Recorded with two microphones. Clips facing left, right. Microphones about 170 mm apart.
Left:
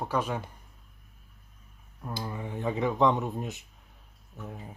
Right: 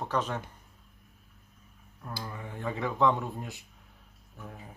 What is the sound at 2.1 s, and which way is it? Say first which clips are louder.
Speech: left 4 dB; 20° left (ahead or behind).